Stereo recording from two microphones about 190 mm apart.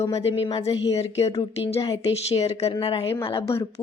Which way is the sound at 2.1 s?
35° left (ahead or behind).